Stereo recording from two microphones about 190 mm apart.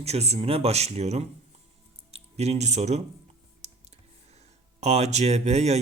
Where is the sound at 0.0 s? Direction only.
35° right (ahead or behind).